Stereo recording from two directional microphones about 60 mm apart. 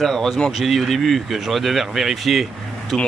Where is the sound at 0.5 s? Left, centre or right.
Centre.